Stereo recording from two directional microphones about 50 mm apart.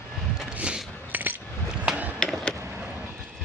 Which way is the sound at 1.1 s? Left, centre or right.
Right.